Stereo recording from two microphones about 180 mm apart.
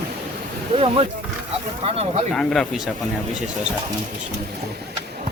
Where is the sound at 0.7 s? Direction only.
30° right (ahead or behind).